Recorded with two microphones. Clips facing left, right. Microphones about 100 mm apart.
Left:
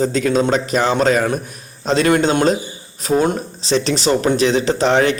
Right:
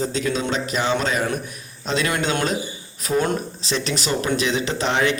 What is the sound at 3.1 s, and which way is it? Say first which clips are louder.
A man's voice: left 5 dB; 25° left (ahead or behind).